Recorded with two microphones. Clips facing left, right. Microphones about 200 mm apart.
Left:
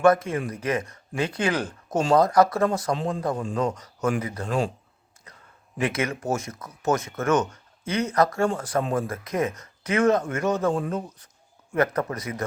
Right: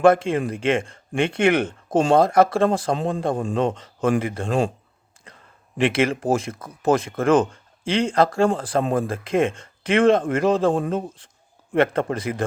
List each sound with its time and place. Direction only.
0.0 s speech: 30° right (ahead or behind)
5.8 s speech: 30° right (ahead or behind)